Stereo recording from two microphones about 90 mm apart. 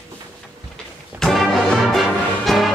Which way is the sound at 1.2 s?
5° left (ahead or behind).